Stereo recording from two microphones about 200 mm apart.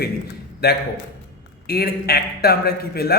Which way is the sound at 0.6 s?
50° left (ahead or behind).